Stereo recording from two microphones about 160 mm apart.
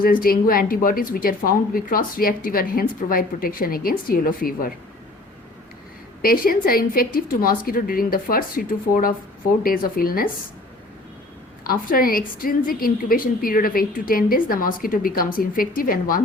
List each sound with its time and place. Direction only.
0.0 s a woman's voice: 65° left (ahead or behind)
6.2 s a woman's voice: 65° left (ahead or behind)
11.6 s a woman's voice: 65° left (ahead or behind)